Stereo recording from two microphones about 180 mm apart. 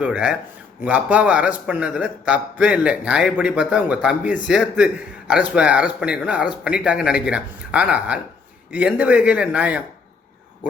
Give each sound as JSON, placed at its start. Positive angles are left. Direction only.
{"t": 0.0, "sound": "a man's voice", "side_deg": -10}